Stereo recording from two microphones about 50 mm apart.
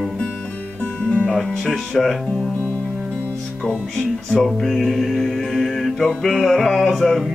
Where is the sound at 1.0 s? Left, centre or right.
Left.